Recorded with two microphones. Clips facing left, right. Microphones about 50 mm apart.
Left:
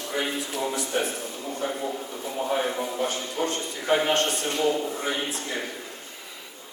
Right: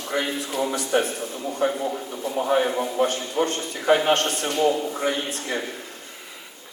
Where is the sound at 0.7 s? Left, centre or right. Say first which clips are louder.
Right 4 dB; right.